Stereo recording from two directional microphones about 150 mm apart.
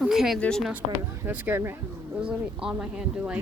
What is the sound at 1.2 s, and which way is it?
Speech, 10° right (ahead or behind).